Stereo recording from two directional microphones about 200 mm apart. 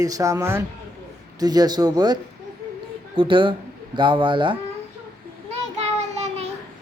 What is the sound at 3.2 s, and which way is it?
Speech, 25° right (ahead or behind).